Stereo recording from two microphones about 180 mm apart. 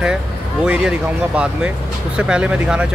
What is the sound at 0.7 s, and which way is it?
Speech, 5° right (ahead or behind).